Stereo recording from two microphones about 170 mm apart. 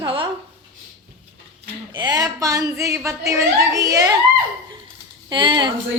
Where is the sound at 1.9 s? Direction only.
25° right (ahead or behind).